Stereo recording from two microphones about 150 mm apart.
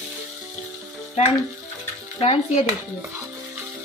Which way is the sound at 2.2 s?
40° left (ahead or behind).